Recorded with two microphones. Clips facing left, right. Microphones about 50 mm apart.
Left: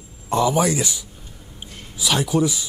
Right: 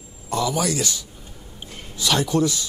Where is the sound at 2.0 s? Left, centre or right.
Centre.